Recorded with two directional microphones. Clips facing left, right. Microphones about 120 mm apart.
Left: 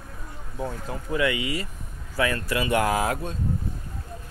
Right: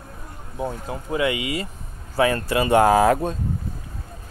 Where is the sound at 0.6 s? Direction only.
20° right (ahead or behind); by 3.4 s 45° right (ahead or behind).